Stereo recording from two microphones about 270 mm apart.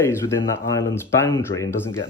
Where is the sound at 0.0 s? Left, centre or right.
Centre.